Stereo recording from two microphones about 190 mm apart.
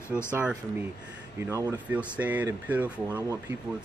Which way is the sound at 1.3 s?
15° right (ahead or behind).